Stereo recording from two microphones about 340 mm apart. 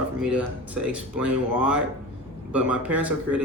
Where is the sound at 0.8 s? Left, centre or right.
Left.